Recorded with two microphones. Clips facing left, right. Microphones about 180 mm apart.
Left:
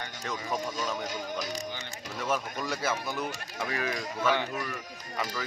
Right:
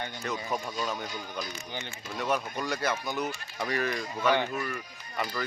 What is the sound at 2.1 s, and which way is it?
Speech, centre (ahead or behind).